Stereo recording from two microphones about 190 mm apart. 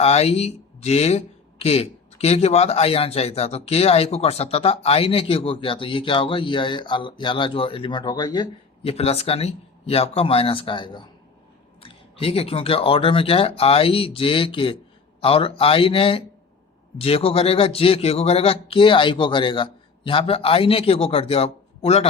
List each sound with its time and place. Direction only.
0.0 s speech: 35° left (ahead or behind)